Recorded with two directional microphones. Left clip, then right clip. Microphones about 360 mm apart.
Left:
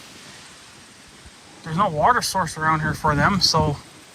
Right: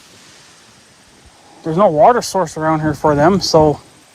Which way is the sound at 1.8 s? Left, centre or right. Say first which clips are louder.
Right 8 dB; centre.